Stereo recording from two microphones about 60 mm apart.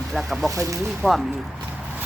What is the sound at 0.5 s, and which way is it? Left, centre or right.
Speech, right.